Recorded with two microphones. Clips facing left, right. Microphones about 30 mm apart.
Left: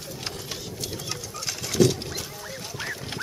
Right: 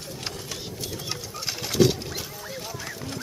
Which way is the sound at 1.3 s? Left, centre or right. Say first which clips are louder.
Right 1 dB; centre.